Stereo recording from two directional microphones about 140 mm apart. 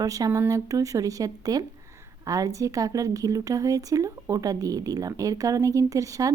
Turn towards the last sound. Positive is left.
turn(degrees=-25)  # may be behind; listen again after turning